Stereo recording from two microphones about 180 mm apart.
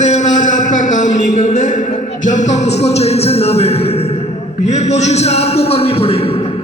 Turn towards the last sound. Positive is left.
turn(degrees=35)  # may be behind; listen again after turning